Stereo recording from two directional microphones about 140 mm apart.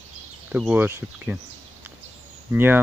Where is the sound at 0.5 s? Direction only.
10° right (ahead or behind).